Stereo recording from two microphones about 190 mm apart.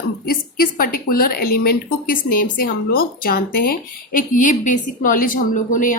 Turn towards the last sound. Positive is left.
turn(degrees=45)  # may be behind; listen again after turning